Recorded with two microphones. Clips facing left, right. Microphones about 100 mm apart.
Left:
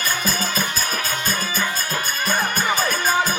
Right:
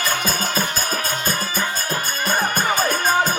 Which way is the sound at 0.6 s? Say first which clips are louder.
Right 2 dB; 35° right (ahead or behind).